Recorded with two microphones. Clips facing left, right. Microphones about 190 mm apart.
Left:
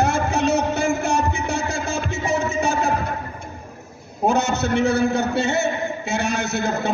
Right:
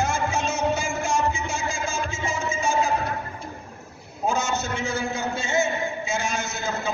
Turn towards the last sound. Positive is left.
turn(degrees=65)  # may be behind; listen again after turning